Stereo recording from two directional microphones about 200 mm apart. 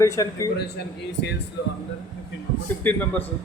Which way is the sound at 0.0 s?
15° left (ahead or behind).